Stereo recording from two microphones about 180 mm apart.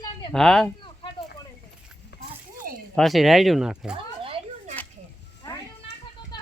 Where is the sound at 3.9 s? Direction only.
30° right (ahead or behind).